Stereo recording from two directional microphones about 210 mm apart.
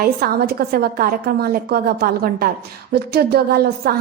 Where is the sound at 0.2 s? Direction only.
45° right (ahead or behind).